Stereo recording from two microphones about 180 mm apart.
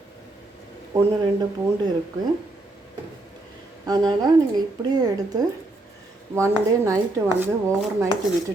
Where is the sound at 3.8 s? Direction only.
20° right (ahead or behind).